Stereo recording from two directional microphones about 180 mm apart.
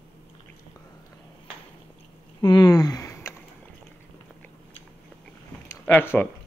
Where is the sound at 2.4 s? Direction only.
25° left (ahead or behind).